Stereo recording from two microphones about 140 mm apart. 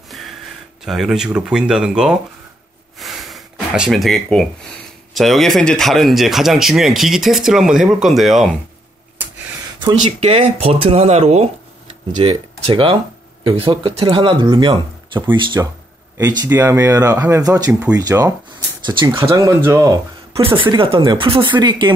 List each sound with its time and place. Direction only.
0.8 s speech: centre (ahead or behind)
3.0 s a sound: centre (ahead or behind)
5.1 s speech: centre (ahead or behind)
9.8 s speech: 35° right (ahead or behind)
16.2 s speech: 20° right (ahead or behind)
17.6 s speech: 10° right (ahead or behind)
17.9 s speech: 25° right (ahead or behind)
20.4 s speech: 35° right (ahead or behind)